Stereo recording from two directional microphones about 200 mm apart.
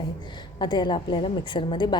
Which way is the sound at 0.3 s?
20° left (ahead or behind).